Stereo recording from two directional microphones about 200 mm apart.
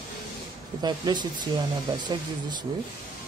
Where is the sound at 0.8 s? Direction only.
20° right (ahead or behind).